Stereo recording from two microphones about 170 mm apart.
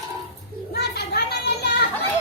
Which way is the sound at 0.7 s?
70° left (ahead or behind).